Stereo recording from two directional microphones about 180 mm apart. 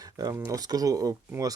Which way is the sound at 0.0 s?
20° right (ahead or behind).